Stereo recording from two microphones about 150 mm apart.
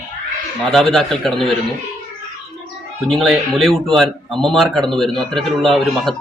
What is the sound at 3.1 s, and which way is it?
A man's voice, centre (ahead or behind).